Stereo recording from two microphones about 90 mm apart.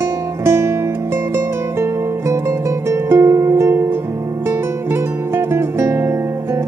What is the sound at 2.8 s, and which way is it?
Music, 30° right (ahead or behind).